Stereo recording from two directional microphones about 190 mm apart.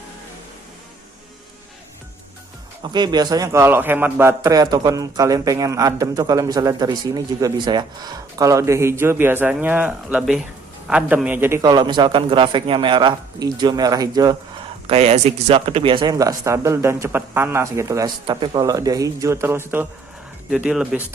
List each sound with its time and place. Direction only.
2.8 s a man's voice: 20° right (ahead or behind)
14.8 s a man's voice: 35° right (ahead or behind); by 21.0 s 5° right (ahead or behind)